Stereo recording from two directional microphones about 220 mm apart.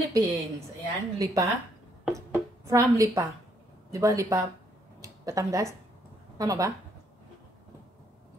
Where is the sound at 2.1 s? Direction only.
15° right (ahead or behind).